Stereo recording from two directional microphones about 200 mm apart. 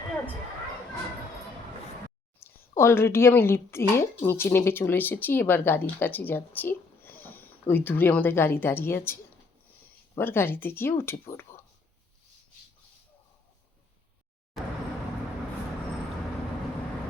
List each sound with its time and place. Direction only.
2.4 s a sound: 10° left (ahead or behind)
2.7 s a woman's voice: 10° left (ahead or behind)
10.2 s a woman's voice: 10° left (ahead or behind)
14.5 s vehicle: centre (ahead or behind)